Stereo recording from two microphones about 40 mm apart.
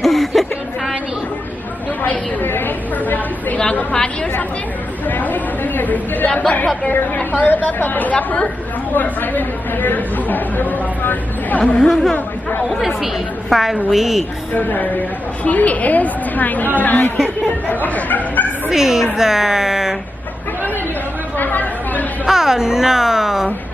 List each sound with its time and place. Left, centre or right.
0.0 s a sound: centre
2.4 s a sound: left
3.0 s a sound: left
3.9 s a woman's voice: left
5.0 s chatter: left
7.3 s speech: left
8.1 s a woman's voice: left
11.6 s speech: left
12.6 s a woman's voice: centre
14.5 s a woman's voice: left
17.8 s speech: left
18.7 s speech: centre
21.4 s chatter: left
22.2 s speech: centre